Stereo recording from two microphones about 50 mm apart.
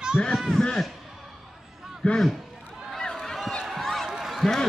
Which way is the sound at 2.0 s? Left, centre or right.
Left.